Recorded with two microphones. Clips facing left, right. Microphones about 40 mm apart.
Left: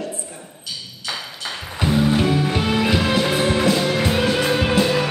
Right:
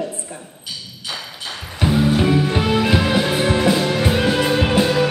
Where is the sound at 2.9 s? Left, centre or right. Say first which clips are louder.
Right 2 dB; centre.